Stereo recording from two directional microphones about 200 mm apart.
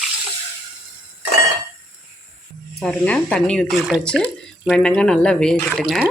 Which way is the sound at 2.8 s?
5° left (ahead or behind).